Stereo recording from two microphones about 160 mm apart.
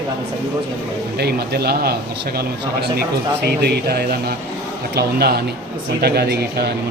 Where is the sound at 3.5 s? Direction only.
85° right.